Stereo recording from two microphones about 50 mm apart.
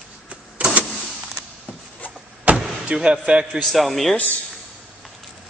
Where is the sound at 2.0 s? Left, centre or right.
Left.